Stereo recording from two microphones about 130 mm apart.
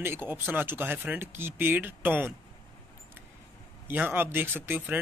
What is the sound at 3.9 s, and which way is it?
A man's voice, 15° right (ahead or behind).